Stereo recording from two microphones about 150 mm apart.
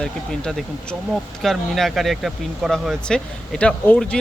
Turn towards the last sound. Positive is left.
turn(degrees=5)  # may be behind; listen again after turning